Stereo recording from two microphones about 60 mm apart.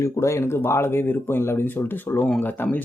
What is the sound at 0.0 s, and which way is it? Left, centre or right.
Speech, left.